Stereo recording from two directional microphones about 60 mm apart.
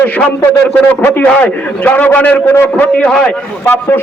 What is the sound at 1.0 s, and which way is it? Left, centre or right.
A man's voice, left.